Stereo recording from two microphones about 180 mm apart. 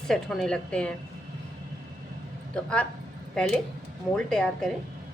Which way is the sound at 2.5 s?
5° left (ahead or behind).